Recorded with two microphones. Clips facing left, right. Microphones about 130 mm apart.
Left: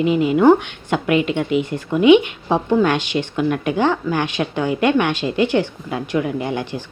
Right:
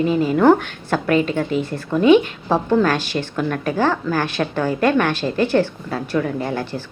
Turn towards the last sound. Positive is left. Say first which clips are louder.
# even
turn(degrees=15)  # may be behind; listen again after turning